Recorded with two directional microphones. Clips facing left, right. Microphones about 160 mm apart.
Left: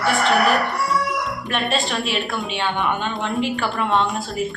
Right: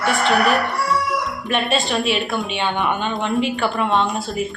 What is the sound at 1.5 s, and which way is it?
Speech, centre (ahead or behind).